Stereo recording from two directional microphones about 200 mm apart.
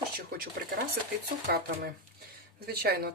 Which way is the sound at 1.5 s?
55° right (ahead or behind).